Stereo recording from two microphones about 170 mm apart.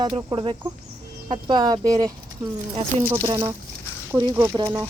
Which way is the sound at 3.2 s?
20° right (ahead or behind).